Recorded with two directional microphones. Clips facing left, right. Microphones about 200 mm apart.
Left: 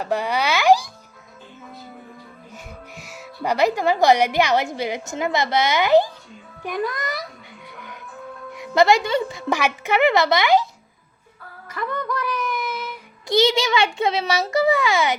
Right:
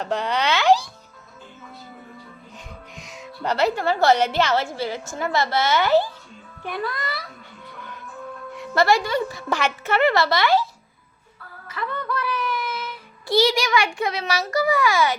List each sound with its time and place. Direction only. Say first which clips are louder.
0.0 s a woman's voice: left 1 dB; 10° left (ahead or behind)
2.9 s a woman's voice: even; 5° left (ahead or behind)
8.5 s a woman's voice: left 3 dB; 15° left (ahead or behind)
9.5 s a woman's voice: left 3 dB; 10° left (ahead or behind)
11.9 s a woman's voice: left 1 dB; 15° left (ahead or behind)